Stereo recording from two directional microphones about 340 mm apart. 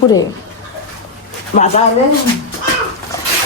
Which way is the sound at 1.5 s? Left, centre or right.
Centre.